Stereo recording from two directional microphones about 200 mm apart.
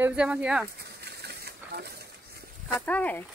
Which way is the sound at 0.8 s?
55° right (ahead or behind).